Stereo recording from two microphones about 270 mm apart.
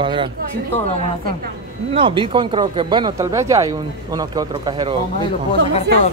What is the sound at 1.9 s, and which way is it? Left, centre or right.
Speech, centre.